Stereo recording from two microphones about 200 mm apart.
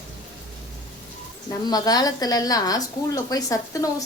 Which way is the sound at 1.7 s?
20° left (ahead or behind).